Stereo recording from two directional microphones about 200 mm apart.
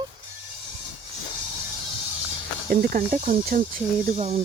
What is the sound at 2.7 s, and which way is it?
Speech, 45° right (ahead or behind).